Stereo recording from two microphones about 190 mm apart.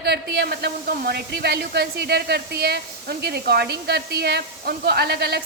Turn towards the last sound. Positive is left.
turn(degrees=-55)  # may be behind; listen again after turning